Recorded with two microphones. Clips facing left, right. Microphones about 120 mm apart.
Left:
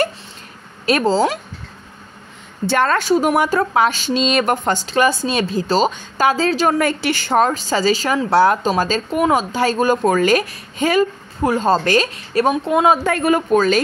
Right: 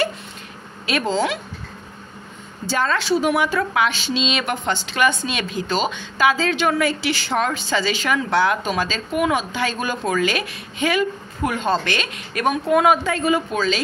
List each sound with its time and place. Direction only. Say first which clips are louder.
0.8 s a woman's voice: left 5 dB; 40° left (ahead or behind)
2.6 s a woman's voice: left 5 dB; 60° left (ahead or behind); by 12.5 s 35° left (ahead or behind)
12.6 s a woman's voice: right 2 dB; 25° left (ahead or behind)
13.0 s speech: left 3 dB; 55° left (ahead or behind)